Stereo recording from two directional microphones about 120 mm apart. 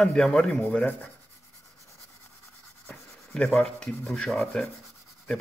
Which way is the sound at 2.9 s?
5° left (ahead or behind).